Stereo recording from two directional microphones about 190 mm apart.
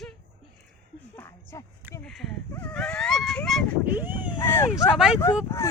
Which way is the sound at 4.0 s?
10° right (ahead or behind).